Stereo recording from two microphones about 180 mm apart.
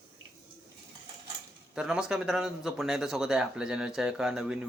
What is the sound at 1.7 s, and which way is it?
Speech, 5° right (ahead or behind).